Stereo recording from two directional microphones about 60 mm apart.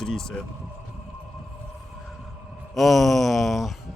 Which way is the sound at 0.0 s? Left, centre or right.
Centre.